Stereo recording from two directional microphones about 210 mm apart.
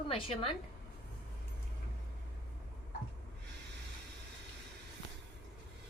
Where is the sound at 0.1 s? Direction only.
25° left (ahead or behind).